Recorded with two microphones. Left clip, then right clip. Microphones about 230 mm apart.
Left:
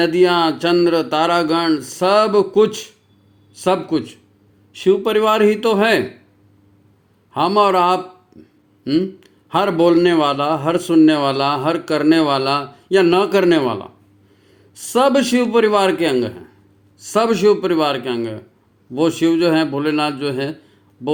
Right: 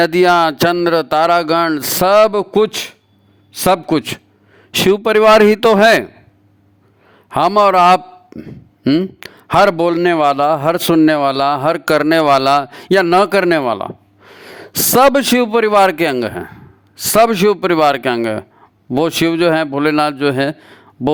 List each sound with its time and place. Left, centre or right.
0.0 s a man's voice: right
7.3 s a man's voice: right